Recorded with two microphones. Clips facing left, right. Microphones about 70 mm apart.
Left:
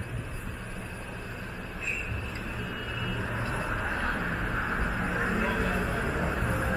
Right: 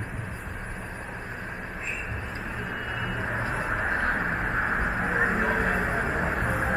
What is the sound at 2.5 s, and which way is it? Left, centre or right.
Vehicle, right.